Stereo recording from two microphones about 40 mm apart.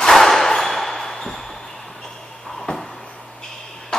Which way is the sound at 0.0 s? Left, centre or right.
Centre.